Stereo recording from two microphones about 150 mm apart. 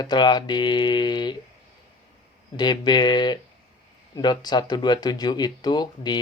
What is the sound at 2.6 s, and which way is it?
Speech, 30° left (ahead or behind).